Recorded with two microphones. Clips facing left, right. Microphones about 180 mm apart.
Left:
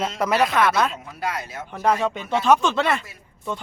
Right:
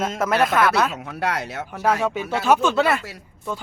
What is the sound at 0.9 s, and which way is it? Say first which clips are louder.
Speech: right 3 dB; 70° right (ahead or behind).